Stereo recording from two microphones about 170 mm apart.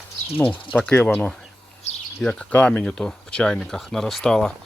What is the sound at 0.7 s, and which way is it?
Speech, 5° left (ahead or behind).